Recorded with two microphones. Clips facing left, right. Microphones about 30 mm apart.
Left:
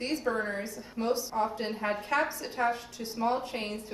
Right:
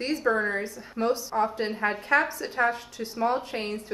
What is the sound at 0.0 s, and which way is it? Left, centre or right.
Speech, right.